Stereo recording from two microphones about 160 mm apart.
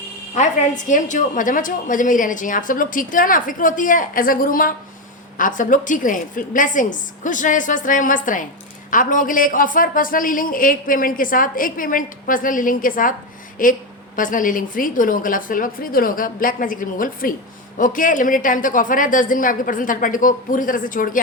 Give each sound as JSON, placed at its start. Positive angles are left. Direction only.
{"t": 0.3, "sound": "a woman's voice", "side_deg": 50}